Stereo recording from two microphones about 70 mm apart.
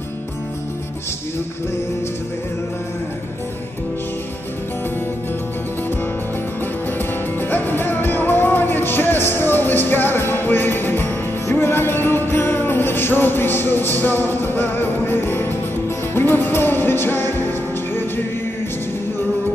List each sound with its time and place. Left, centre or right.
7.3 s music: left